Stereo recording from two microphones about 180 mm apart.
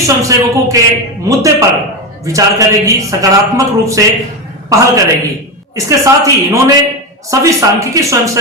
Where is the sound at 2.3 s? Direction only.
15° right (ahead or behind).